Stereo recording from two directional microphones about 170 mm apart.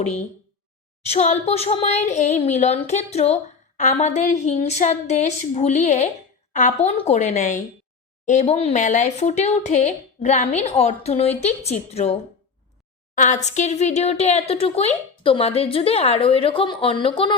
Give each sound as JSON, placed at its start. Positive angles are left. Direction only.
{"t": 1.0, "sound": "a woman's voice", "side_deg": 40}